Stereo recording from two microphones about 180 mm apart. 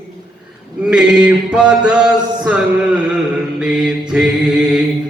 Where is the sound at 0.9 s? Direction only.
5° right (ahead or behind).